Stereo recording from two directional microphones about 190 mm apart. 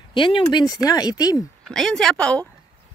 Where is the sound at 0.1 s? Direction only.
25° left (ahead or behind).